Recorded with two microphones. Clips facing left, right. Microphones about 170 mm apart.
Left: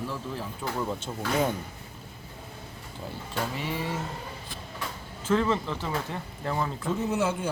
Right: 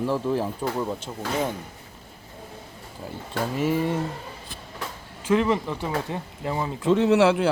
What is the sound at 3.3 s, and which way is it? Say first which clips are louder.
Speech: right 8 dB; 45° right (ahead or behind).